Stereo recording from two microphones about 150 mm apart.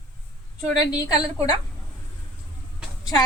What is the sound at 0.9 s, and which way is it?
Speech, 25° left (ahead or behind).